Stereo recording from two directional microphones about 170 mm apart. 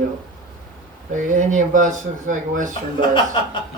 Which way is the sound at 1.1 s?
45° right (ahead or behind).